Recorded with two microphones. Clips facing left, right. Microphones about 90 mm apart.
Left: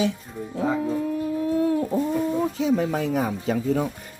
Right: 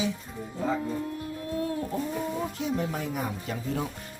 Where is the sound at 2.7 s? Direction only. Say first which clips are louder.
Left 7 dB; 90° left.